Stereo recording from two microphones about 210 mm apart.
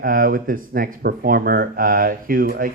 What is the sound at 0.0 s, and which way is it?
A man's voice, 40° right (ahead or behind).